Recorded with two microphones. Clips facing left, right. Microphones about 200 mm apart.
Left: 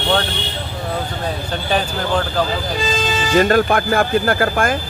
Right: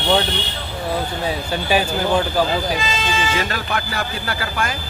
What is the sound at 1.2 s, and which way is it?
Speech, 10° right (ahead or behind).